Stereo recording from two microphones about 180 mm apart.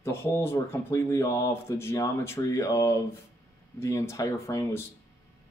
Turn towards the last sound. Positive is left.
turn(degrees=20)  # may be behind; listen again after turning